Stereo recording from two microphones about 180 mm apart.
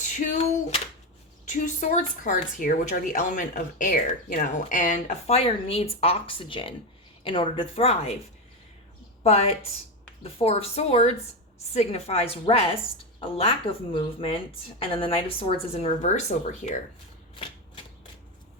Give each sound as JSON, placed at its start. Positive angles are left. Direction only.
{"t": 0.2, "sound": "speech", "side_deg": 45}
{"t": 1.5, "sound": "a woman's voice", "side_deg": 45}
{"t": 9.2, "sound": "a woman's voice", "side_deg": 35}